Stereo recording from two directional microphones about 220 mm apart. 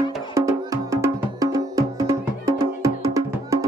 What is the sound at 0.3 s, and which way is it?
Music, 15° right (ahead or behind).